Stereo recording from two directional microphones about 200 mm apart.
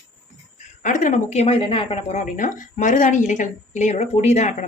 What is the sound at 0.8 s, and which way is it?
A woman's voice, 40° left (ahead or behind).